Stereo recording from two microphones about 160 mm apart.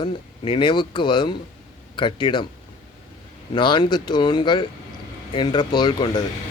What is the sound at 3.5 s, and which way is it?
Speech, 30° left (ahead or behind).